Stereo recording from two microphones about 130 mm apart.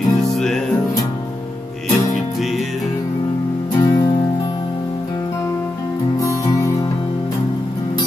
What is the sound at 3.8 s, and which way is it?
Music, 30° left (ahead or behind).